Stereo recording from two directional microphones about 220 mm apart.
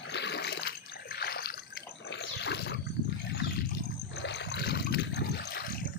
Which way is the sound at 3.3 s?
50° left (ahead or behind).